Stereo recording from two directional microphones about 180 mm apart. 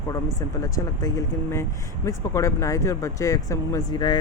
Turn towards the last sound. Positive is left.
turn(degrees=20)  # may be behind; listen again after turning